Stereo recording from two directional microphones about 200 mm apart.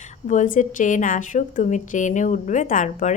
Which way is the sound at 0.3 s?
40° left (ahead or behind).